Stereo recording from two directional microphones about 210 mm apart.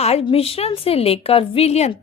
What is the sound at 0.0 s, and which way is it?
A woman's voice, 30° left (ahead or behind).